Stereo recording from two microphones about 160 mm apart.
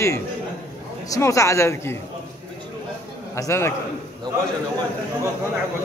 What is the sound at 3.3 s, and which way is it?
Speech, 15° left (ahead or behind).